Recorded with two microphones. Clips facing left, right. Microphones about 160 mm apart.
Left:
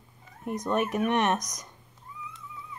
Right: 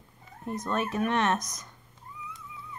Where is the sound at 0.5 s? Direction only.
15° left (ahead or behind).